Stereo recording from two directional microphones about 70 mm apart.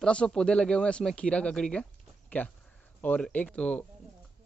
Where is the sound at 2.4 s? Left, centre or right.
Left.